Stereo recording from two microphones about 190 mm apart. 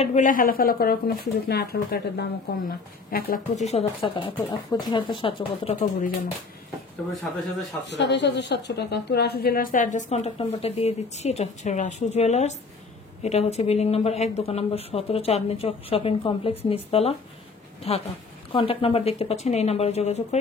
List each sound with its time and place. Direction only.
0.0 s speech: 40° left (ahead or behind)
5.8 s speech: 45° left (ahead or behind)
7.9 s a woman's voice: 65° left (ahead or behind); by 20.3 s 35° left (ahead or behind)